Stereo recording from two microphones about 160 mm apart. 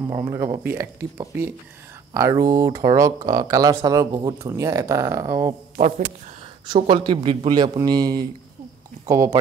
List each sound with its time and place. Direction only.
0.0 s speech: 20° right (ahead or behind)
5.8 s a man's voice: 45° right (ahead or behind)
6.7 s speech: 30° right (ahead or behind)